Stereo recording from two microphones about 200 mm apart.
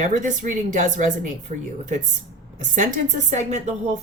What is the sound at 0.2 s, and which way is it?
Speech, 40° right (ahead or behind).